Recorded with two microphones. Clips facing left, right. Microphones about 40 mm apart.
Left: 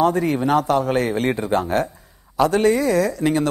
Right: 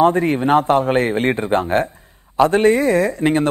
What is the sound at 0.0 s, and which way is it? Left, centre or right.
A man's voice, right.